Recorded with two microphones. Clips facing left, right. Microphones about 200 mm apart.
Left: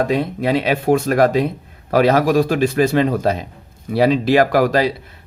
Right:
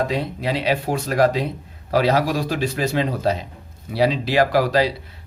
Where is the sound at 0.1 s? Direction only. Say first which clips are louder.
Left 6 dB; 50° left (ahead or behind).